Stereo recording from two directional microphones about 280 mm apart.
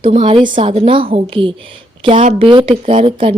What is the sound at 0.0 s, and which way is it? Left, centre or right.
A woman's voice, centre.